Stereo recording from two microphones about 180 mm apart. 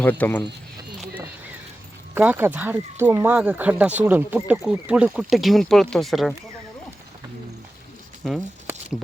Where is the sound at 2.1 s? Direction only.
10° right (ahead or behind).